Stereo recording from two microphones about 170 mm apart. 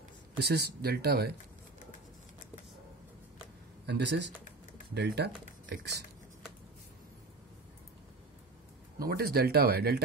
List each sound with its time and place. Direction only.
0.4 s speech: 70° right (ahead or behind)
3.8 s speech: 85° right
4.9 s speech: 75° right (ahead or behind)
8.9 s speech: 65° right (ahead or behind)